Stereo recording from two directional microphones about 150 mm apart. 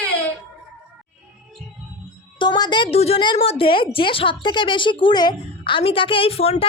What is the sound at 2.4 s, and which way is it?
A woman's voice, 30° left (ahead or behind).